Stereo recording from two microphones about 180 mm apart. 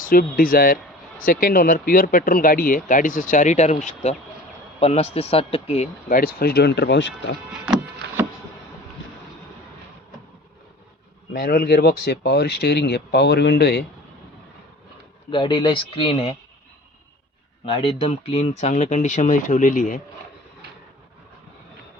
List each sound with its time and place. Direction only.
0.0 s speech: 50° left (ahead or behind); by 7.3 s 85° left
7.5 s music: 5° right (ahead or behind)
11.4 s speech: 60° left (ahead or behind)
15.3 s speech: 30° left (ahead or behind)
17.7 s speech: 30° left (ahead or behind); by 20.0 s 45° left (ahead or behind)